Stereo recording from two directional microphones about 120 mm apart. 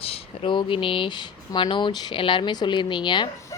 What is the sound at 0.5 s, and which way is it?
Speech, 45° left (ahead or behind).